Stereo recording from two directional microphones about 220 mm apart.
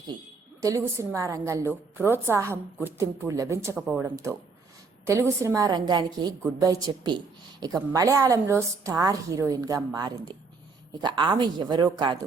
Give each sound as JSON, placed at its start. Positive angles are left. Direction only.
{"t": 0.6, "sound": "a woman's voice", "side_deg": -15}